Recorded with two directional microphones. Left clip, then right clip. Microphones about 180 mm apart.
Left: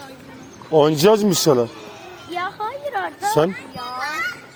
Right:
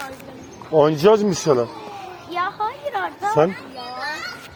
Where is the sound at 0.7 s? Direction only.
60° left (ahead or behind).